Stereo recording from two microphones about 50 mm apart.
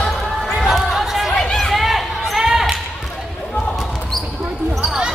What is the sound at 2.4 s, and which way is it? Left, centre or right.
Basketball bounce, centre.